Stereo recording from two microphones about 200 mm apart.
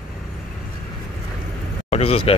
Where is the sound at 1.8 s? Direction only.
30° left (ahead or behind).